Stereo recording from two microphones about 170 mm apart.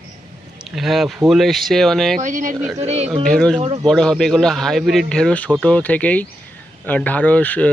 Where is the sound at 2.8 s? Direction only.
40° right (ahead or behind).